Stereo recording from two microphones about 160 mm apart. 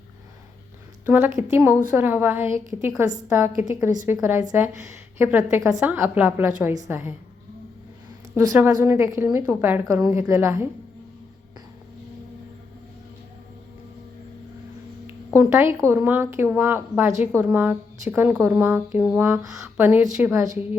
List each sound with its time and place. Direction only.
1.0 s speech: 15° right (ahead or behind)
8.5 s speech: 10° right (ahead or behind)
15.0 s speech: 15° right (ahead or behind)